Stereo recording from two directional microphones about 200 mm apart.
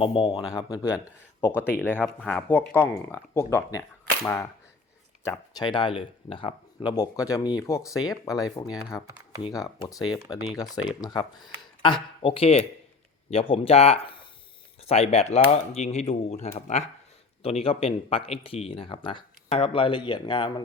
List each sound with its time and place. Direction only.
0.0 s speech: 25° left (ahead or behind)
1.8 s speech: 5° left (ahead or behind); by 20.5 s 25° left (ahead or behind)